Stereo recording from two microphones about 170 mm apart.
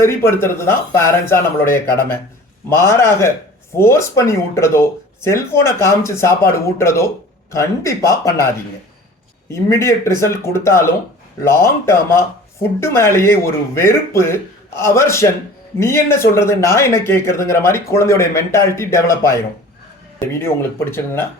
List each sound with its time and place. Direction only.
0.0 s speech: 15° left (ahead or behind)